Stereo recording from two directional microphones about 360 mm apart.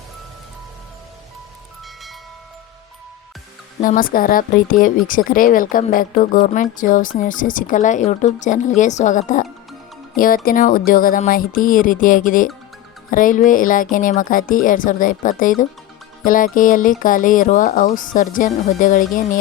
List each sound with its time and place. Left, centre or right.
3.8 s speech: left